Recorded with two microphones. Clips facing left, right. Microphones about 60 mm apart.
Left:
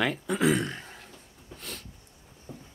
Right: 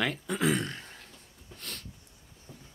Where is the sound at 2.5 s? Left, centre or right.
Left.